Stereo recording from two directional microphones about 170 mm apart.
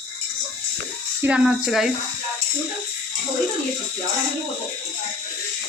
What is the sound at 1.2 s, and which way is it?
Speech, 5° right (ahead or behind).